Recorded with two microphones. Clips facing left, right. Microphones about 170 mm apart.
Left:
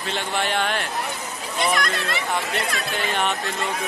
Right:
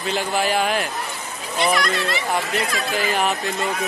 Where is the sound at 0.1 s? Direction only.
5° right (ahead or behind).